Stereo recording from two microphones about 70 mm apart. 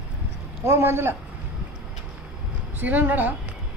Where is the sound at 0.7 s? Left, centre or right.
Right.